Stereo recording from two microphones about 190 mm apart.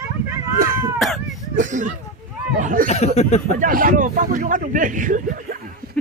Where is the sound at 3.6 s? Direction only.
45° right (ahead or behind).